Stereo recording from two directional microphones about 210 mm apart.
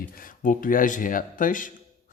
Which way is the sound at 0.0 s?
40° left (ahead or behind).